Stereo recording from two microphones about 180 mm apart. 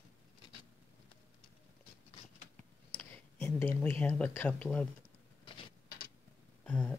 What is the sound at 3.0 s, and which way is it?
Speech, 10° left (ahead or behind).